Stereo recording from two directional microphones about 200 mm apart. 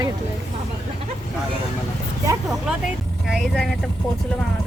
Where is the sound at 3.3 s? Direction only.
Centre (ahead or behind).